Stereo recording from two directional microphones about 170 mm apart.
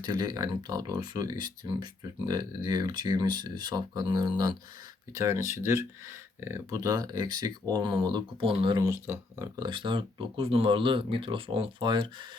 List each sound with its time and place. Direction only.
0.0 s speech: 25° right (ahead or behind)
8.9 s speech: 15° right (ahead or behind)
9.6 s speech: 30° right (ahead or behind)